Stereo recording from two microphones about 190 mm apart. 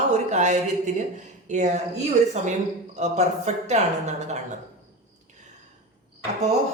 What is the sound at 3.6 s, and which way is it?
Speech, 35° right (ahead or behind).